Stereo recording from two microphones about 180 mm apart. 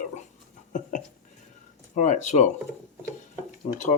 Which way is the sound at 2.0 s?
40° left (ahead or behind).